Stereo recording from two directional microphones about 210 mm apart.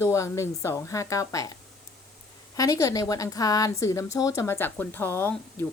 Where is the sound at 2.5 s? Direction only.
15° left (ahead or behind).